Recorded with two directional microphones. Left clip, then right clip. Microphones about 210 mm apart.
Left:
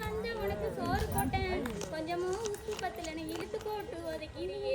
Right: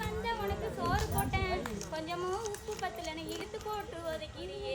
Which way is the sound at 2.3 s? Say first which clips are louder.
Left 1 dB; 30° left (ahead or behind).